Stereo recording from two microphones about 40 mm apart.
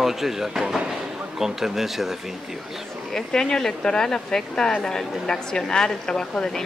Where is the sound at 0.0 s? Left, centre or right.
Centre.